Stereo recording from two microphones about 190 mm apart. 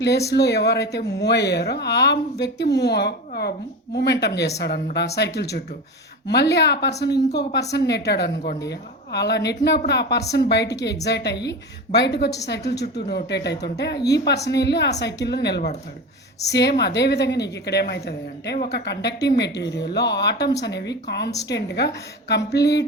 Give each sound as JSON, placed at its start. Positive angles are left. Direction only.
{"t": 0.0, "sound": "a woman's voice", "side_deg": 60}